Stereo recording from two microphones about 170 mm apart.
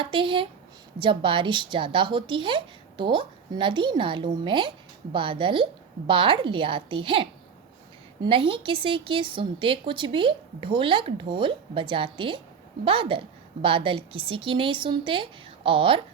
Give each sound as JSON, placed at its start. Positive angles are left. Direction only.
{"t": 0.0, "sound": "a woman's voice", "side_deg": -30}